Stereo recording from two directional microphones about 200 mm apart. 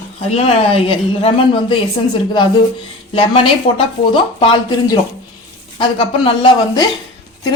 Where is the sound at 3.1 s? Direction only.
25° left (ahead or behind).